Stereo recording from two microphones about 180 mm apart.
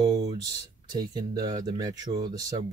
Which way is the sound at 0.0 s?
25° right (ahead or behind).